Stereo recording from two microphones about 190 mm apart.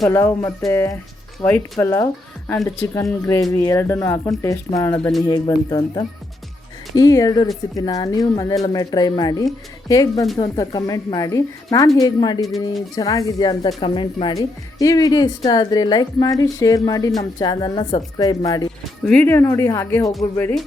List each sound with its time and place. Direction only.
0.1 s speech: 10° left (ahead or behind)
19.0 s speech: 10° left (ahead or behind)